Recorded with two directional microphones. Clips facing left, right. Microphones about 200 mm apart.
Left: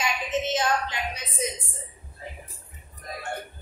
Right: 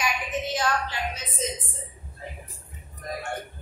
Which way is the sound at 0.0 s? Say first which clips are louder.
Left 2 dB; 25° left (ahead or behind).